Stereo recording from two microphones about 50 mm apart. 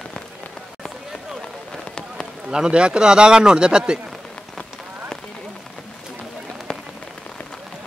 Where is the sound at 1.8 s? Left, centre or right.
Centre.